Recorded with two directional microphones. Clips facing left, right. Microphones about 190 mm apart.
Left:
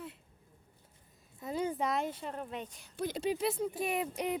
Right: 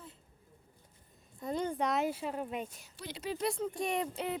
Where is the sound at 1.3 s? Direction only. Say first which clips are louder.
Even; 5° left (ahead or behind).